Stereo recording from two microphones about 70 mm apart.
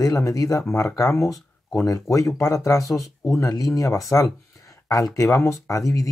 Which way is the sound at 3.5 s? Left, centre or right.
Left.